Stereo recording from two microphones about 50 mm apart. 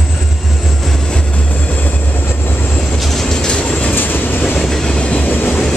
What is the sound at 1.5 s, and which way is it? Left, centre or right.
Vehicle, left.